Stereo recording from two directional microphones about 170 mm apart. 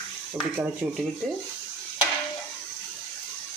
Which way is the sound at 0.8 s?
5° right (ahead or behind).